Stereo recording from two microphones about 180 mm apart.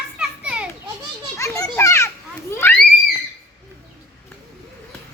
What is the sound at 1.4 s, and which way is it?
Children playing, 15° left (ahead or behind).